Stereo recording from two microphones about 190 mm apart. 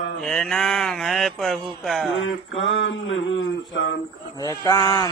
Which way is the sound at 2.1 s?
85° left.